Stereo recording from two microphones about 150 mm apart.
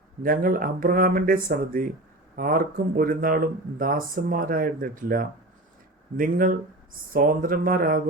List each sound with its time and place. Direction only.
0.2 s speech: 70° right (ahead or behind)